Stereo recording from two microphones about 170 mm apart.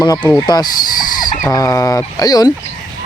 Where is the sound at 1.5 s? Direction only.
20° left (ahead or behind).